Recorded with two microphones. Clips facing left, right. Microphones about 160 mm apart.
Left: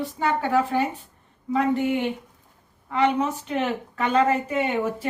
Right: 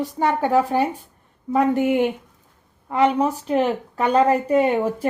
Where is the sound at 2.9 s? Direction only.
35° right (ahead or behind).